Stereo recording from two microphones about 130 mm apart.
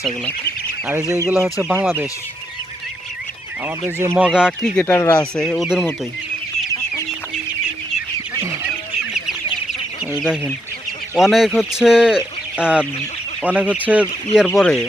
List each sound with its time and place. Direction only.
0.9 s speech: 20° right (ahead or behind)
3.8 s speech: 20° right (ahead or behind)
4.3 s speech: 5° right (ahead or behind)
4.6 s speech: 5° left (ahead or behind)
4.9 s speech: 20° left (ahead or behind)
5.4 s speech: centre (ahead or behind)
8.6 s goose: 5° right (ahead or behind)
11.1 s speech: centre (ahead or behind)
14.4 s speech: 5° left (ahead or behind)